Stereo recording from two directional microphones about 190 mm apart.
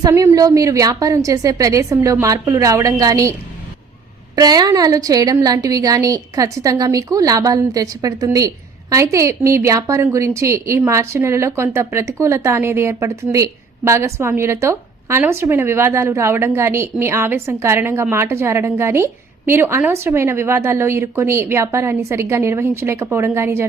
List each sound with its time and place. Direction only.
0.0 s a woman's voice: 15° right (ahead or behind)
4.4 s a woman's voice: 20° right (ahead or behind)